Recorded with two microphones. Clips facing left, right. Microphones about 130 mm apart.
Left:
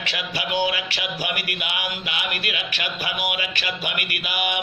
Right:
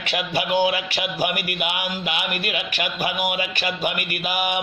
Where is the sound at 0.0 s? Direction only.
50° right (ahead or behind).